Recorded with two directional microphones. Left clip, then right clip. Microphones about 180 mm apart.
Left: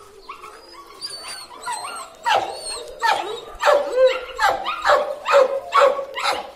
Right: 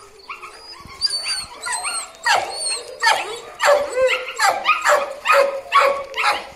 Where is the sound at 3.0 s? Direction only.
55° left (ahead or behind).